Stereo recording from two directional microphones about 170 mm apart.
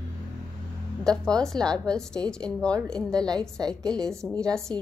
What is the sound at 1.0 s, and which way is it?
A woman's voice, 5° left (ahead or behind).